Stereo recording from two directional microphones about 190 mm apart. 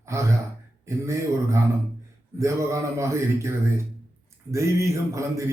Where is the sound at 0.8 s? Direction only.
15° right (ahead or behind).